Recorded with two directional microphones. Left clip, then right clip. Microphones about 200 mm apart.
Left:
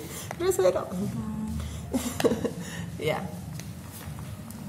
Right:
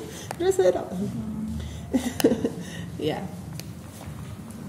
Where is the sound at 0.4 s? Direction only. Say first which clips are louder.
Right 3 dB; 60° left (ahead or behind).